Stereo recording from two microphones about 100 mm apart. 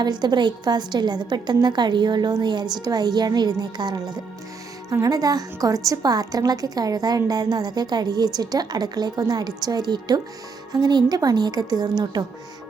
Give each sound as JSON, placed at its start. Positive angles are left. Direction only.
{"t": 0.0, "sound": "a woman's voice", "side_deg": -45}